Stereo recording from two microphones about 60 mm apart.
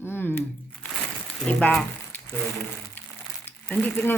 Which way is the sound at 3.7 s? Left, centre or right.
Left.